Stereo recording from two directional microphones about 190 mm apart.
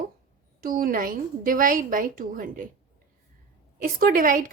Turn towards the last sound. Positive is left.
turn(degrees=-50)  # may be behind; listen again after turning